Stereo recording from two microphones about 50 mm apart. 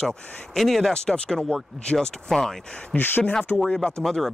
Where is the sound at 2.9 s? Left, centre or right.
Left.